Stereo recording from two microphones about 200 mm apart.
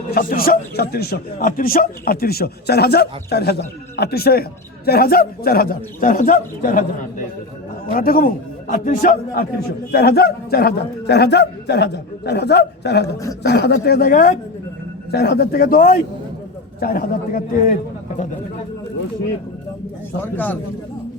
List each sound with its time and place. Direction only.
0.1 s speech: 45° left (ahead or behind)
7.9 s a man's voice: 45° left (ahead or behind)
20.2 s a man's voice: 10° left (ahead or behind)